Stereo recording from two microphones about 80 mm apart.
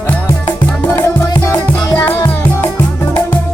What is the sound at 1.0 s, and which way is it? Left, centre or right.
Music, left.